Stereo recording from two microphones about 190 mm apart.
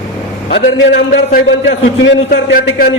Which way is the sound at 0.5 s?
65° left (ahead or behind).